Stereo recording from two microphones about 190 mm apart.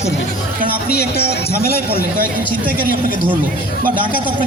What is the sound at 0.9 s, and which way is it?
A man's voice, 55° left (ahead or behind).